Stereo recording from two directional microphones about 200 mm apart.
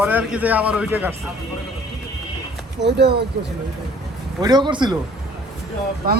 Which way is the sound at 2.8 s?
60° right (ahead or behind).